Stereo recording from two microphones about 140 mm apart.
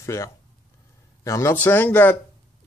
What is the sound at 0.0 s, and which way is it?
Speech, 20° left (ahead or behind).